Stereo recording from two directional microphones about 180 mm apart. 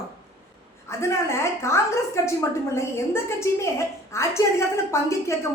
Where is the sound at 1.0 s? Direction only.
15° left (ahead or behind).